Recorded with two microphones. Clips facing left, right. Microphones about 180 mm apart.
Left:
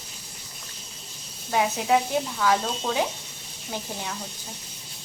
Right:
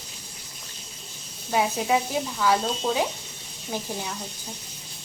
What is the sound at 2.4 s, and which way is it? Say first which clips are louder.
Speech: right 3 dB; 10° right (ahead or behind).